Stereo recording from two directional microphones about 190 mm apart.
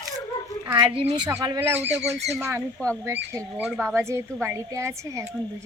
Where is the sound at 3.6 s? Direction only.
Centre (ahead or behind).